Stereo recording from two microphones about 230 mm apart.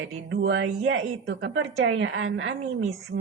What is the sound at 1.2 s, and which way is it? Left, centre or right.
A woman's voice, right.